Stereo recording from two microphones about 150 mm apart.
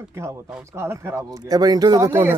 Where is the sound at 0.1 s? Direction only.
15° right (ahead or behind).